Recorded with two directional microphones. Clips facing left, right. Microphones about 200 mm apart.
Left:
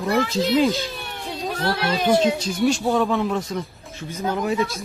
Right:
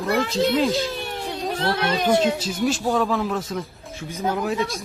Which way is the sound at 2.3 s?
5° right (ahead or behind).